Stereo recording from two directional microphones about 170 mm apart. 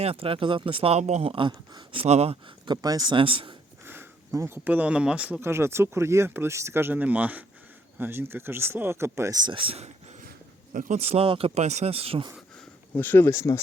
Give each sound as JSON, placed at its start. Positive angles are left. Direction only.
{"t": 0.0, "sound": "speech", "side_deg": -35}
{"t": 2.6, "sound": "speech", "side_deg": -20}
{"t": 3.8, "sound": "speech", "side_deg": -15}
{"t": 12.9, "sound": "speech", "side_deg": 10}